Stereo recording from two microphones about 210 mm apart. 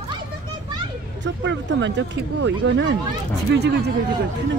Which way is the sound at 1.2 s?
60° right (ahead or behind).